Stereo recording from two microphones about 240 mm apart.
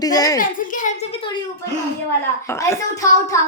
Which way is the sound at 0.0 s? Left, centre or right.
Centre.